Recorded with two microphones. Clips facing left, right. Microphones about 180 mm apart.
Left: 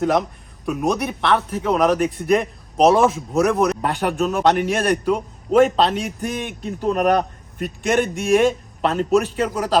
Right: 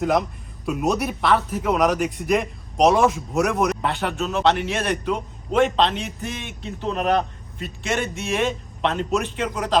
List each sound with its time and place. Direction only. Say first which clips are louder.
0.0 s a man's voice: left 2 dB; centre (ahead or behind)
3.8 s a man's voice: left 4 dB; 45° left (ahead or behind)
5.5 s a man's voice: left 4 dB; 5° left (ahead or behind)
5.8 s a man's voice: left 3 dB; 40° left (ahead or behind)